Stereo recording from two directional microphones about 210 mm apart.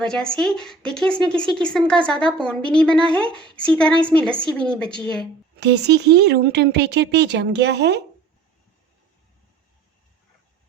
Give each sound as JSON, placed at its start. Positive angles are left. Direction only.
{"t": 0.0, "sound": "speech", "side_deg": 5}
{"t": 3.3, "sound": "a woman's voice", "side_deg": -20}
{"t": 3.6, "sound": "speech", "side_deg": 5}
{"t": 5.5, "sound": "speech", "side_deg": -55}